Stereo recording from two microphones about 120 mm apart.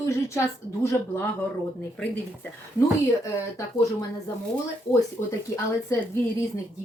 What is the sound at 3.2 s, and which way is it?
Speech, 25° left (ahead or behind).